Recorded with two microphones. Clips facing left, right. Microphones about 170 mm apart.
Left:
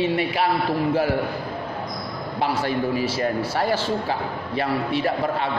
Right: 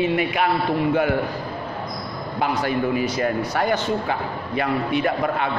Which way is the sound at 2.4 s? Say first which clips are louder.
Right 1 dB; 30° left (ahead or behind).